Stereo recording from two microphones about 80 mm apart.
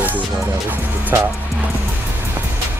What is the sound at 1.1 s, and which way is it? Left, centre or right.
Speech, right.